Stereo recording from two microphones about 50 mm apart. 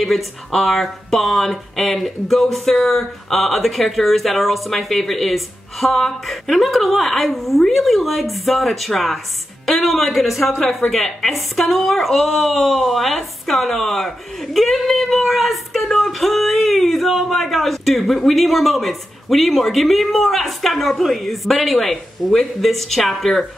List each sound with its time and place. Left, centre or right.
0.0 s speech: centre